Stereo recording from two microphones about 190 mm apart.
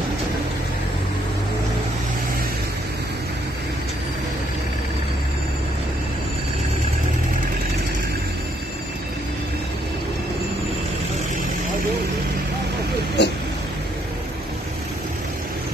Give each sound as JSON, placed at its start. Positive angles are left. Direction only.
{"t": 13.2, "sound": "vehicle", "side_deg": 60}